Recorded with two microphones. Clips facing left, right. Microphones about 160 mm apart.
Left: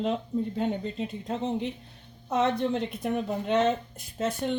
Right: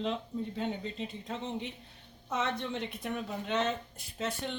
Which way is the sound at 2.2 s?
40° left (ahead or behind).